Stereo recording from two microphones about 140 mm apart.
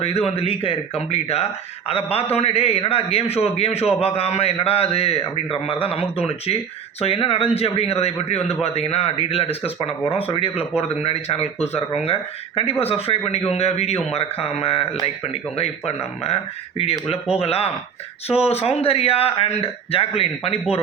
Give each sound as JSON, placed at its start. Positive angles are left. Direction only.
{"t": 0.0, "sound": "a man's voice", "side_deg": 45}